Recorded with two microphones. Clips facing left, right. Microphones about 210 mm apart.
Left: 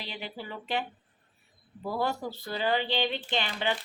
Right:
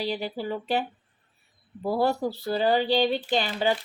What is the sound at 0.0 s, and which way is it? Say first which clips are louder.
Speech: right 10 dB; 40° right (ahead or behind).